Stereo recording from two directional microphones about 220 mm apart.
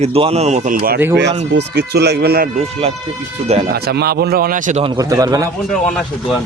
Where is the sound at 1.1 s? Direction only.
50° right (ahead or behind).